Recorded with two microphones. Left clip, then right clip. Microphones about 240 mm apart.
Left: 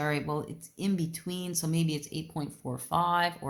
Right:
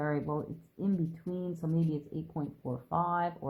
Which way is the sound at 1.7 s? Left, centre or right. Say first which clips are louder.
Left 1 dB; left.